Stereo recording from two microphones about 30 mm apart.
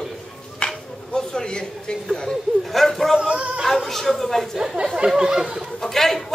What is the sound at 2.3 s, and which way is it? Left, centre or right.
A woman's voice, centre.